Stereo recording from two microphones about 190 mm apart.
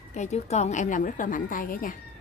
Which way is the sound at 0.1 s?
35° left (ahead or behind).